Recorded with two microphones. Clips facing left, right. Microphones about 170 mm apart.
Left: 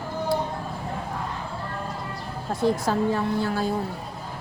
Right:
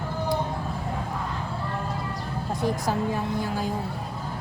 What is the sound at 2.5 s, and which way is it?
A woman's voice, 15° right (ahead or behind).